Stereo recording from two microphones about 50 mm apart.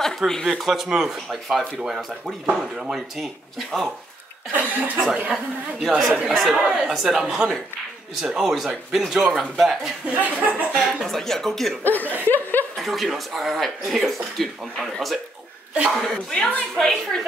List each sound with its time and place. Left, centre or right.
0.3 s a woman's voice: centre
0.6 s speech: centre
1.6 s speech: right
1.9 s speech: centre
4.5 s speech: right
5.3 s speech: centre
6.5 s speech: centre
10.2 s speech: right
10.7 s speech: centre
11.8 s chuckle: left
12.7 s speech: centre
16.3 s a woman's voice: left
16.7 s a woman's voice: centre